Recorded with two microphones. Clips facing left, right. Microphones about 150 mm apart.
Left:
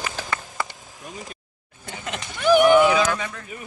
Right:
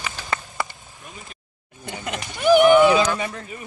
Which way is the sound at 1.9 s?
15° right (ahead or behind).